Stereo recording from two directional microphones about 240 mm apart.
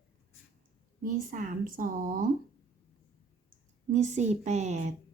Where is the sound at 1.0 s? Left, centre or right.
Right.